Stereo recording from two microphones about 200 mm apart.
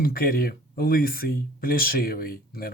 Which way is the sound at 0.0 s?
45° left (ahead or behind).